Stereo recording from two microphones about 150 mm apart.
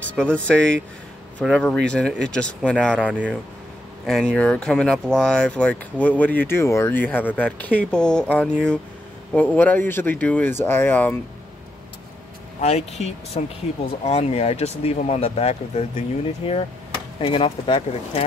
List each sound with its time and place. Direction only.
0.2 s speech: 5° left (ahead or behind)
3.0 s speech: 10° right (ahead or behind); by 11.1 s 10° left (ahead or behind)
12.6 s speech: 45° left (ahead or behind)